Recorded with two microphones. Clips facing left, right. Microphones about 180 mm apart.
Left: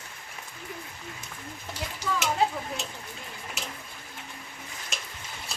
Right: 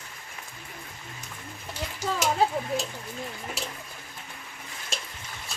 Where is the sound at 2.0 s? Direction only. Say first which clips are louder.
Right 1 dB; 30° right (ahead or behind).